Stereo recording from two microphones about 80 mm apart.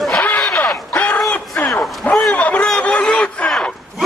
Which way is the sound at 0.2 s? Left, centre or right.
Left.